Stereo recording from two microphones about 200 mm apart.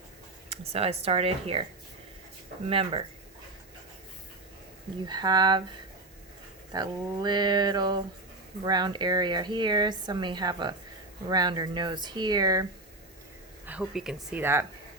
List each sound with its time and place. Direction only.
0.5 s a woman's voice: 30° right (ahead or behind)
2.6 s a woman's voice: 30° right (ahead or behind)
5.0 s a woman's voice: 20° right (ahead or behind)
6.7 s a woman's voice: 20° right (ahead or behind)
13.7 s speech: 5° right (ahead or behind)